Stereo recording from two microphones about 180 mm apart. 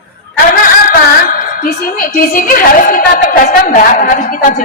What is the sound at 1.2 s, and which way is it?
Music, 50° left (ahead or behind).